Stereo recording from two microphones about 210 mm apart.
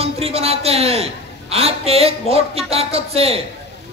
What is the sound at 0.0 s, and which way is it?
Speech, 30° right (ahead or behind).